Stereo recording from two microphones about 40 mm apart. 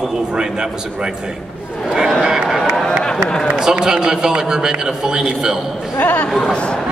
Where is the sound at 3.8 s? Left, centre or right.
Centre.